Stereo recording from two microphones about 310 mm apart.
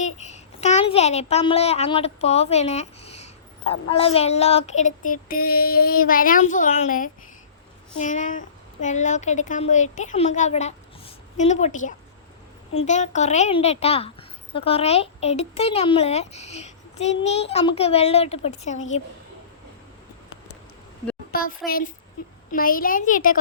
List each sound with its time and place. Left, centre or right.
0.0 s a child's voice: left
21.3 s a child's voice: left
22.5 s a child's voice: left